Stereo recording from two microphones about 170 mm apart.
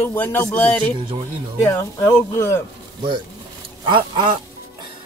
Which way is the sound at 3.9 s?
30° right (ahead or behind).